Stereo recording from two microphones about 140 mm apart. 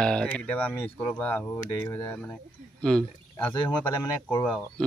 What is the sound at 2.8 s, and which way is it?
Speech, 5° left (ahead or behind).